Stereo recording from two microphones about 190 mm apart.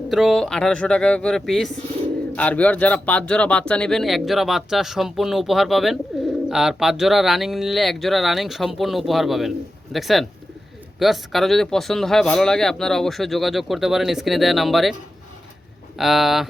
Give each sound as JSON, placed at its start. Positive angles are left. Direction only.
{"t": 0.1, "sound": "speech", "side_deg": 0}
{"t": 16.0, "sound": "speech", "side_deg": 0}